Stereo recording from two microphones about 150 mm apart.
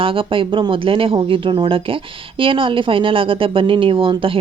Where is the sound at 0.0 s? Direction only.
35° right (ahead or behind).